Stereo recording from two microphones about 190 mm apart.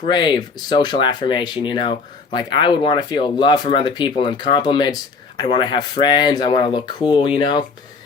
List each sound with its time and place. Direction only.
0.1 s speech: 25° left (ahead or behind)